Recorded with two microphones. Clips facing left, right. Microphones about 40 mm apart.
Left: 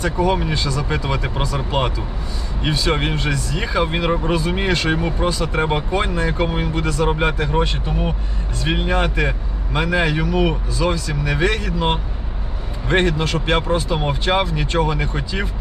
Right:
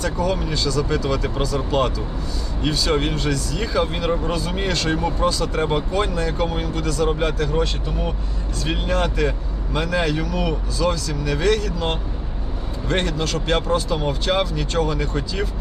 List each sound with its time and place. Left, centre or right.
0.0 s speech: left